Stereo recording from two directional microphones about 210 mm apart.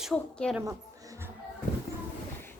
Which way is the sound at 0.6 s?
15° right (ahead or behind).